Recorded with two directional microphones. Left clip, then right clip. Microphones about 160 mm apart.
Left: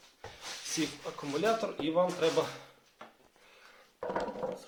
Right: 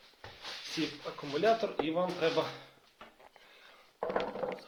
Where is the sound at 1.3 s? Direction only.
5° right (ahead or behind).